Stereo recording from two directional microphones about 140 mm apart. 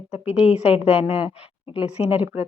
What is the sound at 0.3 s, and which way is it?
A woman's voice, 5° right (ahead or behind).